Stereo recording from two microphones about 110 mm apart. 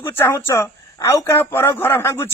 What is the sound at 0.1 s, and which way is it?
A man's voice, 20° left (ahead or behind).